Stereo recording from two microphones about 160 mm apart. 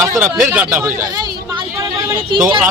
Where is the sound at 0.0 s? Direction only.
15° right (ahead or behind).